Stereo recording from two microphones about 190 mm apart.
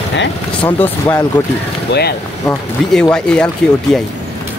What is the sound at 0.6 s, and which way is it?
Speech, 10° left (ahead or behind).